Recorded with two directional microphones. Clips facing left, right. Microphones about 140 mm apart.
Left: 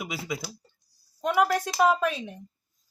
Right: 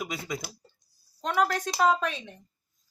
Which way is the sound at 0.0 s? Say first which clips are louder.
Left 1 dB; 5° left (ahead or behind).